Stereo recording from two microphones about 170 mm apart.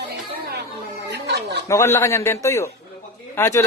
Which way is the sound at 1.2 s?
80° right.